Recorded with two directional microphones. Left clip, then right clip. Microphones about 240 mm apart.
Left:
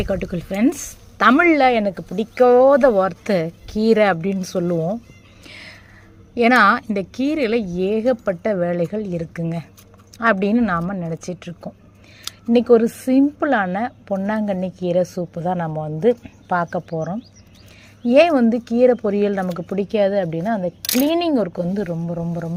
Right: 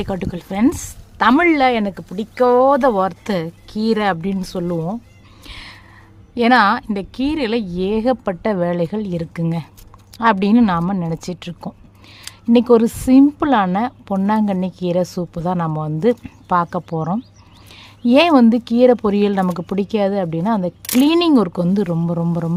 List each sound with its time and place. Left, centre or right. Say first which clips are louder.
0.0 s a woman's voice: left 1 dB; centre
5.4 s music: right 3 dB; centre
6.3 s a woman's voice: even; centre
12.5 s a woman's voice: right 1 dB; centre